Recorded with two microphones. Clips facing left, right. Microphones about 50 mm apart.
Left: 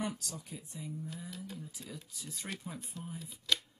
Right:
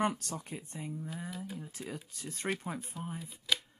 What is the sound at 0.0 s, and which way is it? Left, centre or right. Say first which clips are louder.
Speech: right 6 dB; right.